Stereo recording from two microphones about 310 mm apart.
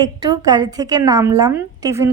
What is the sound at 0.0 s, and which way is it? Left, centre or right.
A woman's voice, centre.